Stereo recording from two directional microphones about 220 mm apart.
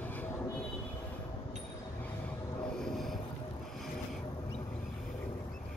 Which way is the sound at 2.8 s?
Centre (ahead or behind).